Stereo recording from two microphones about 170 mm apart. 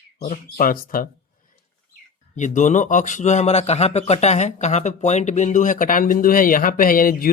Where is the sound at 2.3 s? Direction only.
45° left (ahead or behind).